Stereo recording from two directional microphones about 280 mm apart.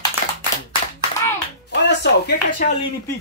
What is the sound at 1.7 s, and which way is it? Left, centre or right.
Speech, left.